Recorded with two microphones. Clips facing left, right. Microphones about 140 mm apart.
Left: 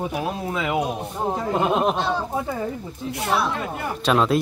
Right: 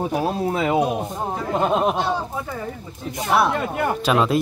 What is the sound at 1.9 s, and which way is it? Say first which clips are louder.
Speech: right 1 dB; 15° right (ahead or behind).